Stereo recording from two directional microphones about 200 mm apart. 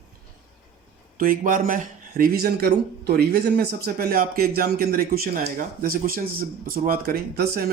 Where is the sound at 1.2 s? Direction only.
45° right (ahead or behind).